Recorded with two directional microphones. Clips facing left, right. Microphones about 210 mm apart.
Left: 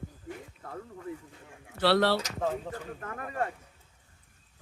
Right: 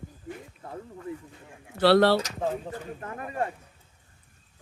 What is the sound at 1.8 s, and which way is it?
Speech, 45° right (ahead or behind).